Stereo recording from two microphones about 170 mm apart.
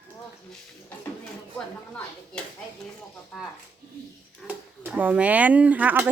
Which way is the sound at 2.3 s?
5° left (ahead or behind).